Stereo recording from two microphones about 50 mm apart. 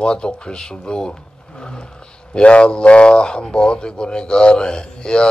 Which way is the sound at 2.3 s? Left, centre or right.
Left.